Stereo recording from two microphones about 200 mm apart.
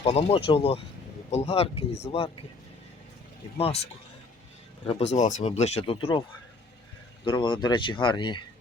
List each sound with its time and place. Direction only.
0.0 s speech: 30° left (ahead or behind)
4.9 s speech: 30° left (ahead or behind)
7.3 s speech: 25° left (ahead or behind)